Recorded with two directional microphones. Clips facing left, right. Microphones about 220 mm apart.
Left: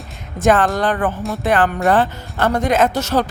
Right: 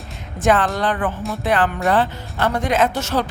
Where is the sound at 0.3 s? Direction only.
45° left (ahead or behind).